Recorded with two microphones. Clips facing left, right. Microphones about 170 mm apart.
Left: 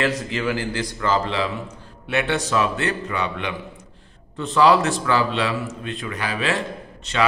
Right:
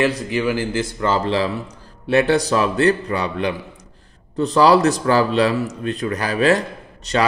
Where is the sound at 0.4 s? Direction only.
20° right (ahead or behind).